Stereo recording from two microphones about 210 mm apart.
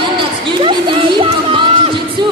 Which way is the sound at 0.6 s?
25° right (ahead or behind).